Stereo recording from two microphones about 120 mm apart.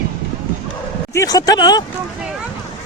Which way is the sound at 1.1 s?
30° left (ahead or behind).